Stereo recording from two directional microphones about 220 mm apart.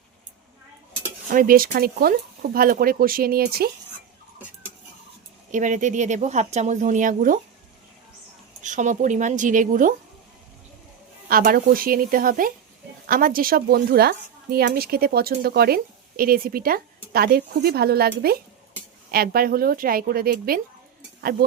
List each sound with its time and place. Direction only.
1.3 s speech: 40° right (ahead or behind)
5.5 s speech: 35° right (ahead or behind)
8.6 s speech: 35° right (ahead or behind)
11.3 s speech: 40° right (ahead or behind)